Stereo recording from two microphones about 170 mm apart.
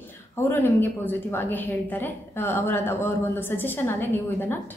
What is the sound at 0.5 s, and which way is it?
A woman's voice, 10° left (ahead or behind).